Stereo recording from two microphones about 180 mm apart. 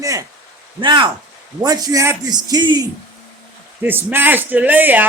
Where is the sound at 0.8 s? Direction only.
25° right (ahead or behind).